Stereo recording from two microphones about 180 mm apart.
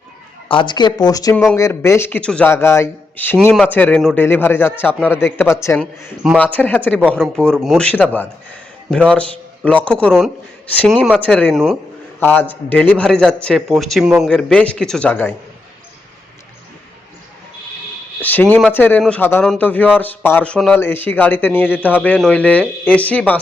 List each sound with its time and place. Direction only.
0.4 s a man's voice: 25° left (ahead or behind); by 15.3 s 10° left (ahead or behind)
18.2 s a man's voice: 10° left (ahead or behind)